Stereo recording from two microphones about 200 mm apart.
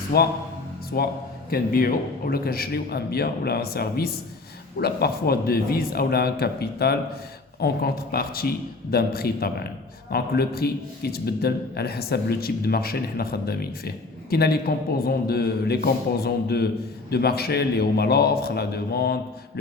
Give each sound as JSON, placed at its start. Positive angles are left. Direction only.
{"t": 0.1, "sound": "a man's voice", "side_deg": 50}